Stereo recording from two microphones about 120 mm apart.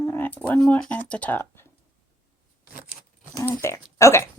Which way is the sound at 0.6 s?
10° left (ahead or behind).